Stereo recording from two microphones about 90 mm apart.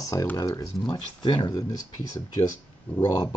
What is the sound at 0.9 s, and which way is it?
Speech, 55° left (ahead or behind).